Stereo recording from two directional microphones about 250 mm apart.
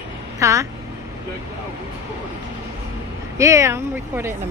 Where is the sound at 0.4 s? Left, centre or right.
Centre.